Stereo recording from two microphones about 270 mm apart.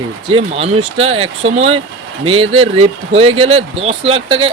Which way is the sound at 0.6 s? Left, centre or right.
Right.